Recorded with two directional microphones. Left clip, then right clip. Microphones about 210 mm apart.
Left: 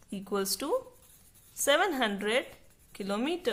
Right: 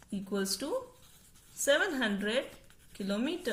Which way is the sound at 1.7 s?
40° left (ahead or behind).